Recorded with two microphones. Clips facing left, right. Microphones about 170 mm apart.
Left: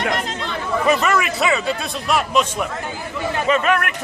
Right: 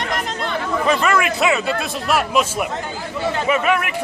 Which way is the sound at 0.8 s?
Centre (ahead or behind).